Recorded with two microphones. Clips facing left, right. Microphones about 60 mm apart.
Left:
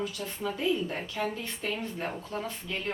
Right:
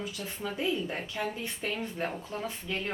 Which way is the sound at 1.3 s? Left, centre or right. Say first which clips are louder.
Even; centre.